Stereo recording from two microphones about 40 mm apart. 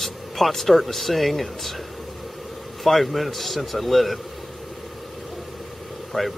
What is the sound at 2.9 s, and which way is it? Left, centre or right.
Speech, centre.